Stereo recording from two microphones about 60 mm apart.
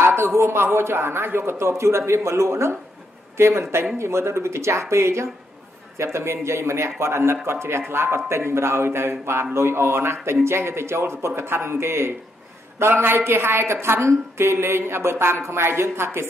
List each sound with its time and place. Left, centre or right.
0.0 s speech: right